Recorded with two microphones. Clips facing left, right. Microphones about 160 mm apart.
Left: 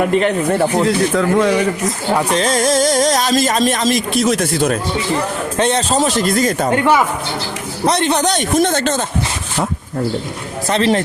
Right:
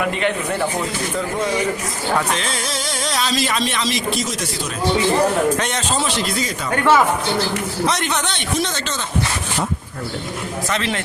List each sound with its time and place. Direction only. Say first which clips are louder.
0.1 s speech: left 7 dB; 40° left (ahead or behind)
0.7 s speech: left 9 dB; 90° left
2.3 s speech: left 9 dB; 40° left (ahead or behind); by 4.8 s 60° left (ahead or behind)
5.5 s speech: left 7 dB; 30° left (ahead or behind); by 6.7 s 50° left (ahead or behind)
6.7 s speech: right 1 dB; 20° left (ahead or behind)
7.9 s speech: left 10 dB; 30° left (ahead or behind); by 9.0 s 50° left (ahead or behind)
10.7 s speech: left 10 dB; 35° left (ahead or behind)